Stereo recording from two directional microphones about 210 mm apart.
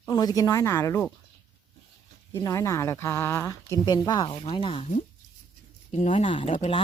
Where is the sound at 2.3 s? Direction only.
15° left (ahead or behind); by 6.8 s 30° left (ahead or behind).